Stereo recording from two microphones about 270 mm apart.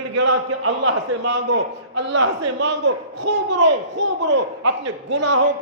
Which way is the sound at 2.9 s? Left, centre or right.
Right.